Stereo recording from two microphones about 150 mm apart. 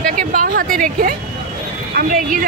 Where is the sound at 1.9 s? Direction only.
70° right (ahead or behind).